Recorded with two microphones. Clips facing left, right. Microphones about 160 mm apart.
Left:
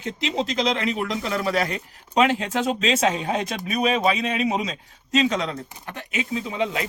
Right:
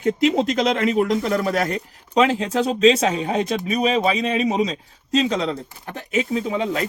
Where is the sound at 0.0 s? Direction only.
50° right (ahead or behind).